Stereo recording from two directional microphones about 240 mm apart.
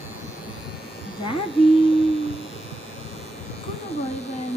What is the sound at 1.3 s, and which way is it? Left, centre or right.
Speech, left.